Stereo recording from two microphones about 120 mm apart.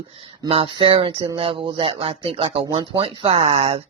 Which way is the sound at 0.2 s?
50° right (ahead or behind).